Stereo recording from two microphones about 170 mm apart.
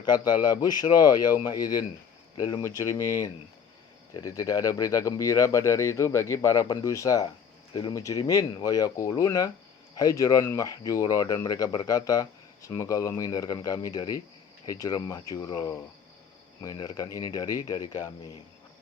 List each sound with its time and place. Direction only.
0.0 s speech: 25° left (ahead or behind)